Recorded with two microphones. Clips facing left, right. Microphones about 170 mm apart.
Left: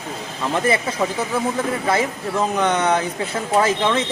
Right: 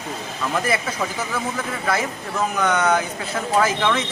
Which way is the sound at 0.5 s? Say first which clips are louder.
Left 4 dB; 25° left (ahead or behind).